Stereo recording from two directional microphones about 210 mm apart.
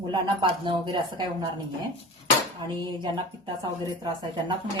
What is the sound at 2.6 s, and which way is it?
Speech, 20° right (ahead or behind).